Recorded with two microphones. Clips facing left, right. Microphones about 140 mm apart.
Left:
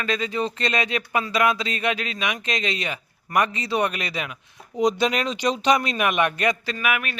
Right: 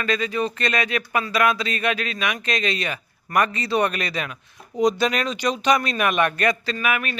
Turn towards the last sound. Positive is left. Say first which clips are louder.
# right 1 dB
turn(degrees=5)  # may be behind; listen again after turning